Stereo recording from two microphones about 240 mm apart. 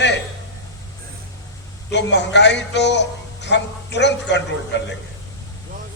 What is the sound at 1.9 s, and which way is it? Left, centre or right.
A man's voice, left.